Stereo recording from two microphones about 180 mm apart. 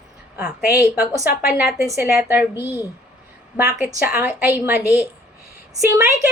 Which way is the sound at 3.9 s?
10° right (ahead or behind).